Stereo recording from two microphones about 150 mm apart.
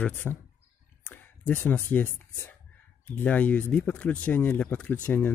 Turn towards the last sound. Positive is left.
turn(degrees=10)  # may be behind; listen again after turning